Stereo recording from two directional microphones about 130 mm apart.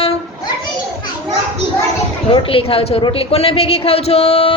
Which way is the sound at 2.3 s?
45° left (ahead or behind).